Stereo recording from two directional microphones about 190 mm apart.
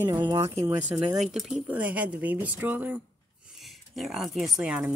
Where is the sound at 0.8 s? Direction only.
5° right (ahead or behind).